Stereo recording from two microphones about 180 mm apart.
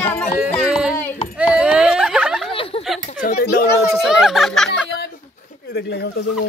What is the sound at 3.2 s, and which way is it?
Speech, 55° left (ahead or behind).